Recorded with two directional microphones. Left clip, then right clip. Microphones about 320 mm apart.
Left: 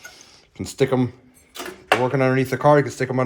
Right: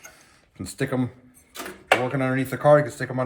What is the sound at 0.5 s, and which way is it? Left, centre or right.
Speech, centre.